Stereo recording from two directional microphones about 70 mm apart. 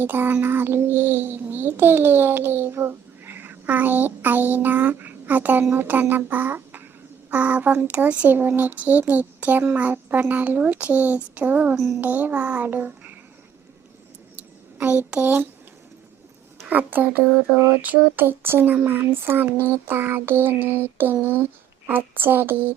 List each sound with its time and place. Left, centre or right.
0.0 s a child's voice: right
14.8 s a child's voice: right
16.6 s a child's voice: right
20.4 s a sound: right
21.8 s a child's voice: right